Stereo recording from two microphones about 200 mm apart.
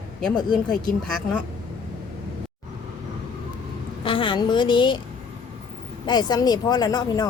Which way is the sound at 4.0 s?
25° left (ahead or behind).